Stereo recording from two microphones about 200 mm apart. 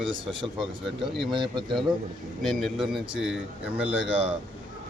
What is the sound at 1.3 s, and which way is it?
Speech, 25° right (ahead or behind).